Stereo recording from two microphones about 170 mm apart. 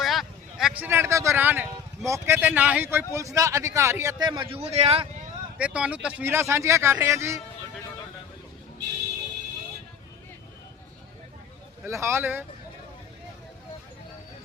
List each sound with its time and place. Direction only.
0.0 s speech: centre (ahead or behind); by 5.0 s 35° right (ahead or behind)
5.5 s speech: 5° right (ahead or behind)
11.9 s speech: 15° right (ahead or behind)